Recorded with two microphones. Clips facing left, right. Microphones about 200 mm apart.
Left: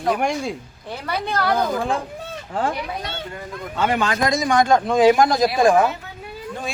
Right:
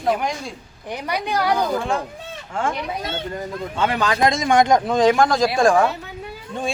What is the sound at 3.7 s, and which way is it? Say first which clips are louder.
A woman's voice: even; 30° right (ahead or behind).